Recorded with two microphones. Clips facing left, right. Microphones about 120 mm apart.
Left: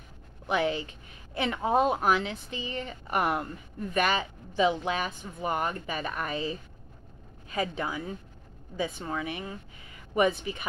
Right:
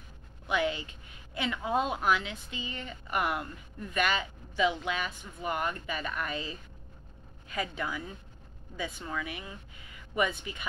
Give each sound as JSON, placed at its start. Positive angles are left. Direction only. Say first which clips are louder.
{"t": 0.5, "sound": "speech", "louder": "left 3 dB", "side_deg": 35}